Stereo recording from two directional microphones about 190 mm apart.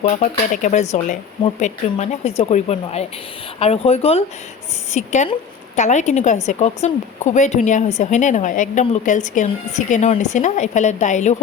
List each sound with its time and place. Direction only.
0.0 s a woman's voice: 35° left (ahead or behind)